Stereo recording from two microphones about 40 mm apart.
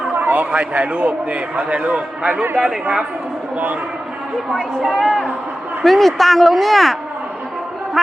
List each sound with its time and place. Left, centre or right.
0.1 s a sound: right
0.5 s a man's voice: right
2.3 s speech: right
4.9 s a woman's voice: centre
8.0 s speech: centre